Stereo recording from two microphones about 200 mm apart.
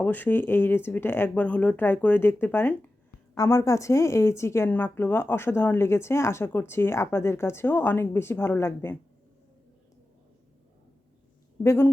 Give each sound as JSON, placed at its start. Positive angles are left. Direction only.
{"t": 0.0, "sound": "a woman's voice", "side_deg": 10}
{"t": 11.6, "sound": "a woman's voice", "side_deg": 15}